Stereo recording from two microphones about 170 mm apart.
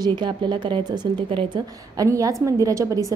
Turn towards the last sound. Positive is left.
turn(degrees=-20)  # may be behind; listen again after turning